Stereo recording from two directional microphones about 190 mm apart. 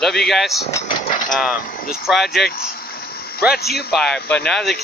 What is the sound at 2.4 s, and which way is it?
A man's voice, 55° left (ahead or behind).